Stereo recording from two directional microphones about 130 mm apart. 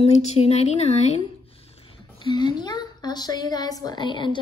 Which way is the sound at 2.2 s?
35° left (ahead or behind).